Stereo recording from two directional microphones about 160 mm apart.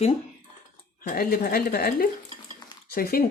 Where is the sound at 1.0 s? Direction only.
65° left (ahead or behind).